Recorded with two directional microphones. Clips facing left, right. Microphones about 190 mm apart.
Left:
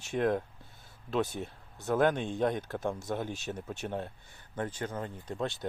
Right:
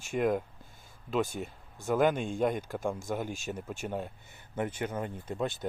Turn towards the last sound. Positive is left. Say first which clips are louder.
# right 1 dB
turn(degrees=-5)  # may be behind; listen again after turning